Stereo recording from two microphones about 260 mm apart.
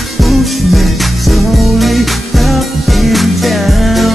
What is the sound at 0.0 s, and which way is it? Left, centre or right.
Music, centre.